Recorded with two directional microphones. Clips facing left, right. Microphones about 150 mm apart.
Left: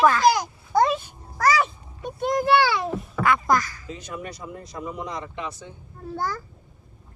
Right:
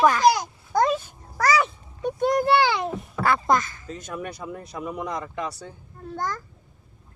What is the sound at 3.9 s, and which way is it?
Speech, 45° right (ahead or behind).